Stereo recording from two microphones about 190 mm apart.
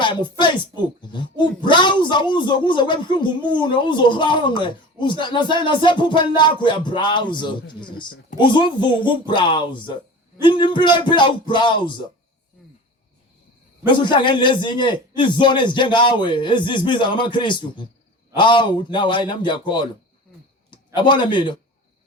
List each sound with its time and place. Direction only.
0.0 s speech: 25° left (ahead or behind)
13.8 s a man's voice: 25° left (ahead or behind)